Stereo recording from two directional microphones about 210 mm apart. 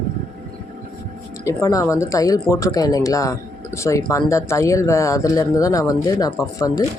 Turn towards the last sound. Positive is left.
turn(degrees=15)  # may be behind; listen again after turning